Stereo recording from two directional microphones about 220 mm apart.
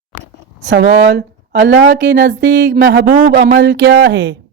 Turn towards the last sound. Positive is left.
turn(degrees=-60)  # may be behind; listen again after turning